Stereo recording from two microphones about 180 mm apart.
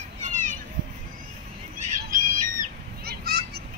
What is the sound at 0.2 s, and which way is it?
Children playing, 45° right (ahead or behind).